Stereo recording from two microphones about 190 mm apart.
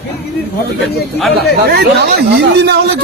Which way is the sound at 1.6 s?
60° right (ahead or behind).